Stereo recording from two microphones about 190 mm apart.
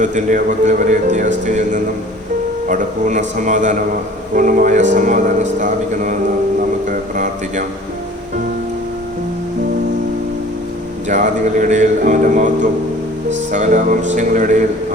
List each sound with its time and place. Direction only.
0.0 s speech: 40° right (ahead or behind)
11.1 s speech: 40° right (ahead or behind)
13.5 s speech: 40° right (ahead or behind)